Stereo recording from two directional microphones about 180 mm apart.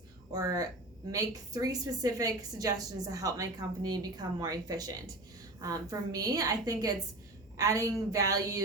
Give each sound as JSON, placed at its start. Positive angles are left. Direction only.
{"t": 0.3, "sound": "a woman's voice", "side_deg": -20}